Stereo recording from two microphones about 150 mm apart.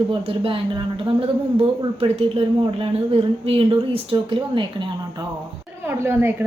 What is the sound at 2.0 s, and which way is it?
A woman's voice, 40° right (ahead or behind).